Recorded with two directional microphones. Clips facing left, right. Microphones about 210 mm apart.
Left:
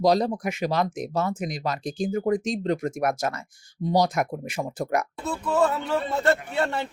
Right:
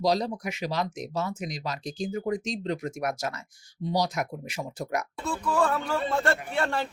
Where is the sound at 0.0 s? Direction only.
50° left (ahead or behind).